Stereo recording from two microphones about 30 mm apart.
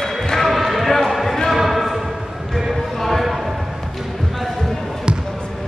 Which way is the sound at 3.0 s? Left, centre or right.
Centre.